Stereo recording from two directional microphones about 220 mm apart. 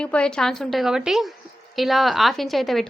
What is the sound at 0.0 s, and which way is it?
A woman's voice, 5° left (ahead or behind).